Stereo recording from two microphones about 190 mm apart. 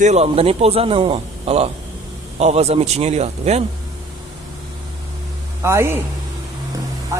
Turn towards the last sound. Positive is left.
turn(degrees=-15)  # may be behind; listen again after turning